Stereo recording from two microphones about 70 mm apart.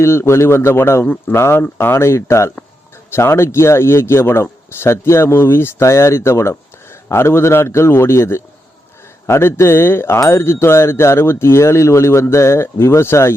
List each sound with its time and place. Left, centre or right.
0.0 s speech: left